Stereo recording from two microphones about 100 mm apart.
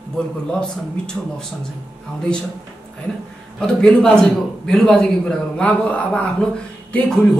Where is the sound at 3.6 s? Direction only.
10° left (ahead or behind).